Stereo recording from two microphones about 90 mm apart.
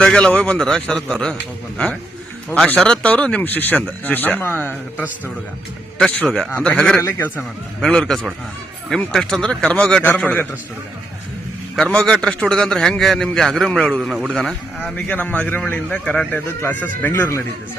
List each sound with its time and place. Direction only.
0.0 s speech: 10° left (ahead or behind)
2.7 s speech: 10° left (ahead or behind)
6.2 s a man's voice: 5° left (ahead or behind)
11.8 s a man's voice: 5° left (ahead or behind)
14.9 s a man's voice: 20° left (ahead or behind)